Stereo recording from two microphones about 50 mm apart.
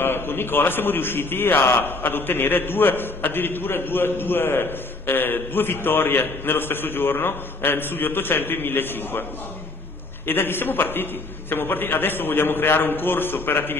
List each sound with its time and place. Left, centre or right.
0.0 s a man's voice: left
10.2 s a man's voice: left